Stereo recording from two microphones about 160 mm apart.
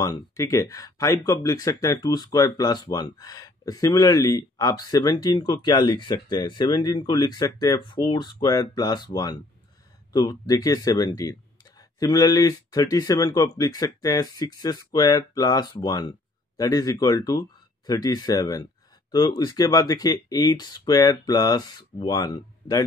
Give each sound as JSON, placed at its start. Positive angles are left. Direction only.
{"t": 0.0, "sound": "speech", "side_deg": 20}